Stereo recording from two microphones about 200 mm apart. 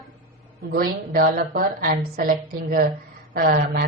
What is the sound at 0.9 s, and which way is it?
A woman's voice, 45° right (ahead or behind).